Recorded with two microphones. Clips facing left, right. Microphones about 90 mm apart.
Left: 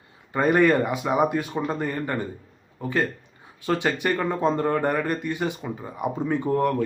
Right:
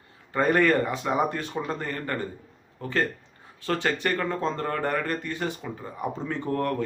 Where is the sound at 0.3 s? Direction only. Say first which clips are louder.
Left 2 dB; 15° left (ahead or behind).